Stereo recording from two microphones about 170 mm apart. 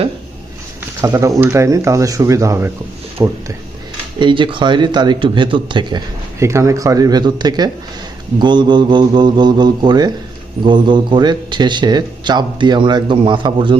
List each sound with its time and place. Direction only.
1.0 s speech: 20° right (ahead or behind)
4.2 s speech: 30° right (ahead or behind)
6.4 s speech: 15° right (ahead or behind)